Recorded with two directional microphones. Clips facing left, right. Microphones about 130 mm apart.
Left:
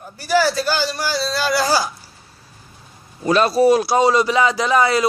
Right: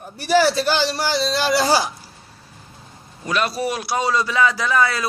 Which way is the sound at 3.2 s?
35° left (ahead or behind).